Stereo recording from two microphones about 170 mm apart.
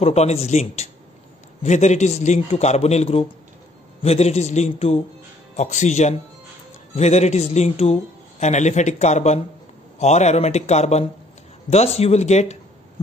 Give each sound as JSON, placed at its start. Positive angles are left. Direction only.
{"t": 0.0, "sound": "a man's voice", "side_deg": 40}